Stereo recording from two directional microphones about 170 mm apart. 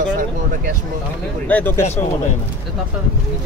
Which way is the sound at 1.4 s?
10° left (ahead or behind).